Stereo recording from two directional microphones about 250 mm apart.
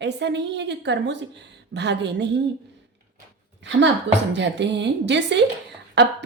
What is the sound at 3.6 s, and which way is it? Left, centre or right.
A woman's voice, right.